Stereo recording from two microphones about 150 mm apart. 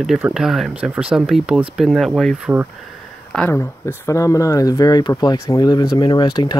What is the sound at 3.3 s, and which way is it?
Speech, 15° left (ahead or behind).